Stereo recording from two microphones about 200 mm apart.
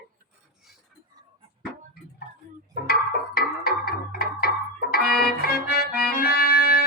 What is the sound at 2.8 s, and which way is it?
Music, 50° left (ahead or behind).